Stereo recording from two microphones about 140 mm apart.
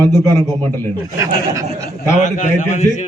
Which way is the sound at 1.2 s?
20° right (ahead or behind).